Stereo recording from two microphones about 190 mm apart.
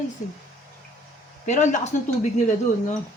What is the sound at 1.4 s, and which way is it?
Speech, 40° left (ahead or behind).